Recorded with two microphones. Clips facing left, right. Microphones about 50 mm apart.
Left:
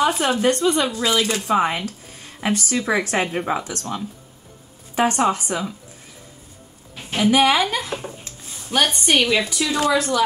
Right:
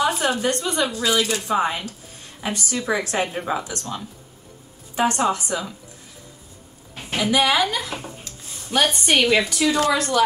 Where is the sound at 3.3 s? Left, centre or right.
Left.